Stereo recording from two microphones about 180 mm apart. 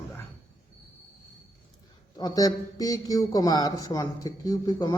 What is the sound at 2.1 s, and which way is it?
A man's voice, 20° left (ahead or behind).